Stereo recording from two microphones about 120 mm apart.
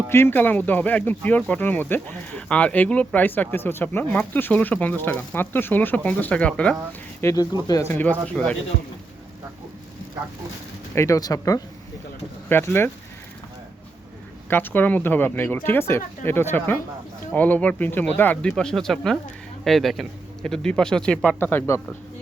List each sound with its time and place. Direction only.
0.1 s speech: 20° left (ahead or behind)
7.2 s speech: 25° left (ahead or behind)
7.9 s speech: 10° left (ahead or behind)
10.9 s speech: 25° left (ahead or behind)
12.5 s speech: 20° left (ahead or behind)
14.5 s speech: 15° left (ahead or behind)